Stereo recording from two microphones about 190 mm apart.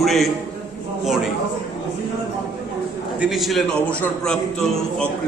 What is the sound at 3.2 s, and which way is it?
A man's voice, centre (ahead or behind).